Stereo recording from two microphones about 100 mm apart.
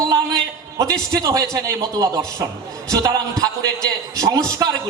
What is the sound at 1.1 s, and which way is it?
A man's voice, 40° right (ahead or behind).